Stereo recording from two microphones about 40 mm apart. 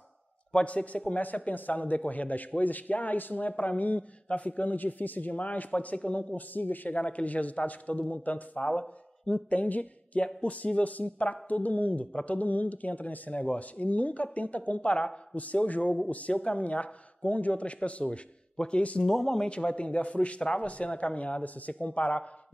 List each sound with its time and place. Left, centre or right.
0.7 s a man's voice: left
6.3 s speech: left
7.0 s a man's voice: left
19.2 s speech: centre
19.5 s a man's voice: left